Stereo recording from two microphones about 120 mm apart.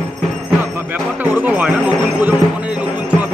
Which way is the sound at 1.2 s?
15° right (ahead or behind).